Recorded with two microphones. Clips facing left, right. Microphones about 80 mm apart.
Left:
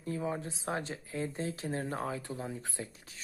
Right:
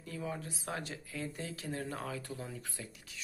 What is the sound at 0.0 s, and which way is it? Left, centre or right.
Speech, left.